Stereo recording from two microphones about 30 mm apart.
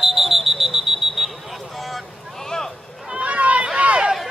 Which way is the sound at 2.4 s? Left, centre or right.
Centre.